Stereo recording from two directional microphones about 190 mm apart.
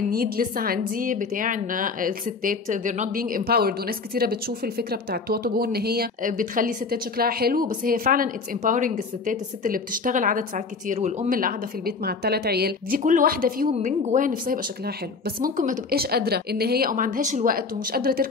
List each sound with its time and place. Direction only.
0.1 s a woman's voice: 50° right (ahead or behind)
13.0 s a woman's voice: 45° right (ahead or behind)